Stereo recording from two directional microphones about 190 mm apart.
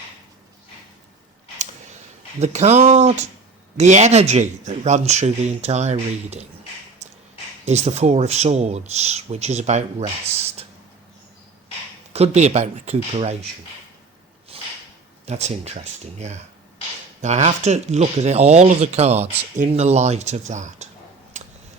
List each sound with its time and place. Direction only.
2.4 s speech: 35° right (ahead or behind)
7.6 s speech: 35° right (ahead or behind)
12.1 s speech: 35° right (ahead or behind)
14.5 s a sound: 30° right (ahead or behind)
15.3 s speech: 35° right (ahead or behind)